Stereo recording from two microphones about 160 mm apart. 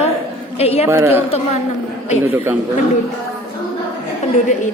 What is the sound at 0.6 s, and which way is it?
Speech, 40° left (ahead or behind).